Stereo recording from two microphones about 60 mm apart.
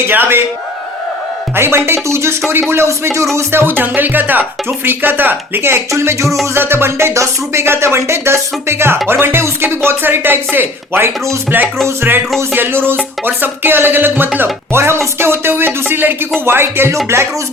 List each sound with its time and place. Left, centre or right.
0.1 s speech: right
1.5 s music: right
3.5 s speech: right
5.9 s music: right
6.4 s music: right
9.0 s speech: right
12.5 s speech: right
14.7 s music: right
16.5 s speech: right